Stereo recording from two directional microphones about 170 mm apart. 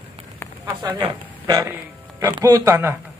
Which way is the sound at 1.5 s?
20° right (ahead or behind).